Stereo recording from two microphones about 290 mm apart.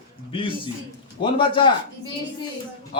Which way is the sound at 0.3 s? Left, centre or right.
Centre.